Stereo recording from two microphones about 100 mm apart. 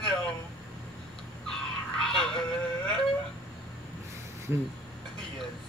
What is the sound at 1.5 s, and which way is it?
Music, 5° left (ahead or behind).